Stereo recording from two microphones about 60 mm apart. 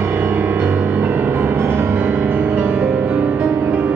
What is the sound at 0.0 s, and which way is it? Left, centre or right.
Music, right.